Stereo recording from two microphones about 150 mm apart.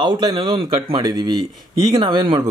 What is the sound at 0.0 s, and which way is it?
Speech, 30° right (ahead or behind).